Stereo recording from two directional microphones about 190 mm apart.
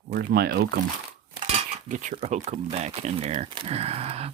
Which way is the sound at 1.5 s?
40° right (ahead or behind).